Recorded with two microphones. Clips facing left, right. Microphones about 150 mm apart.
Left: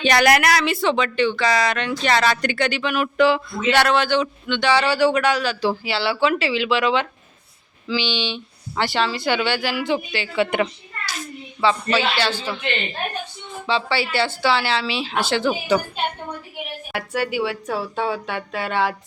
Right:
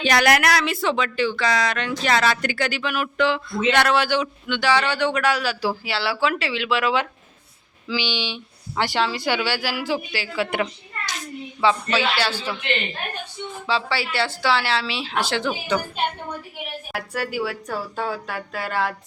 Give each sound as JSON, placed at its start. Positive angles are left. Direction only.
{"t": 0.0, "sound": "speech", "side_deg": 0}
{"t": 3.2, "sound": "speech", "side_deg": 10}
{"t": 3.8, "sound": "speech", "side_deg": -5}
{"t": 11.6, "sound": "speech", "side_deg": -10}
{"t": 13.7, "sound": "speech", "side_deg": 0}
{"t": 16.9, "sound": "speech", "side_deg": 0}